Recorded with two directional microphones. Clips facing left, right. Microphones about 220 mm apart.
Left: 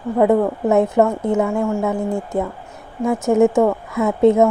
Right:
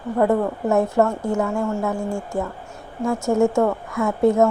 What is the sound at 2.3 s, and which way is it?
Speech, 20° left (ahead or behind).